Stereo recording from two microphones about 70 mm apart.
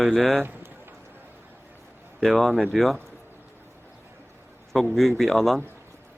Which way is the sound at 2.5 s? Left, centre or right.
Right.